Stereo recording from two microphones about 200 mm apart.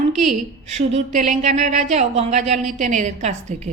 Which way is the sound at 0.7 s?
35° right (ahead or behind).